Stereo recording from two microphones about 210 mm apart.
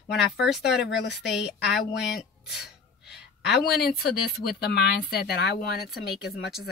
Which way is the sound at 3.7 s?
50° left (ahead or behind).